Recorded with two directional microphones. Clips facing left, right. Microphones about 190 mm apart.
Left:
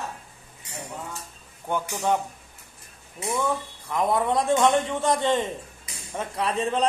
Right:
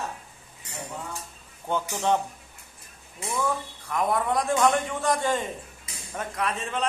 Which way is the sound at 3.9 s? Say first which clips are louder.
Left 2 dB; 25° left (ahead or behind).